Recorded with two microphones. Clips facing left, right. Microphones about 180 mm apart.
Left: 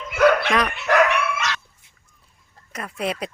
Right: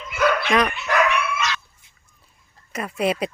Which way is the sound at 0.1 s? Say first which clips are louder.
Left 4 dB; 55° left (ahead or behind).